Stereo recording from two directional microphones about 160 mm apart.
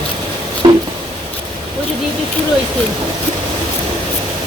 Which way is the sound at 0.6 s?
30° right (ahead or behind).